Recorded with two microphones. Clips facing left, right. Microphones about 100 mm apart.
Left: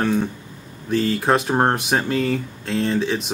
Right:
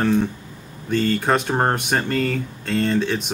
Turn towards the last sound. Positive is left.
turn(degrees=0)  # may be behind; listen again after turning